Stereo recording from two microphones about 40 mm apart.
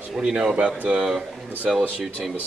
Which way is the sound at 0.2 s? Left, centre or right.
Right.